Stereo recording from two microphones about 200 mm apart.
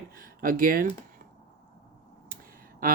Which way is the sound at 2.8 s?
45° right (ahead or behind).